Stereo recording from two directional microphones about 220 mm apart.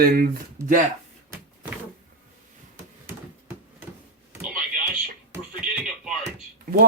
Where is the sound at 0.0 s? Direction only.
45° right (ahead or behind).